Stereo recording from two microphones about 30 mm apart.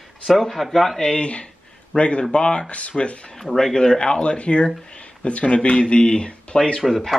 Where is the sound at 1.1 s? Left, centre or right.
Left.